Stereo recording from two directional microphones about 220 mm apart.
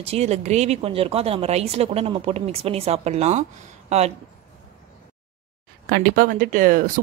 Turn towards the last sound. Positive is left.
turn(degrees=-40)  # may be behind; listen again after turning